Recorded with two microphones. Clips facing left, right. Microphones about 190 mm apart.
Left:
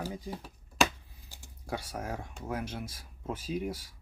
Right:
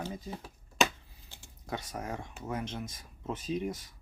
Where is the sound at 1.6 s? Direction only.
10° left (ahead or behind).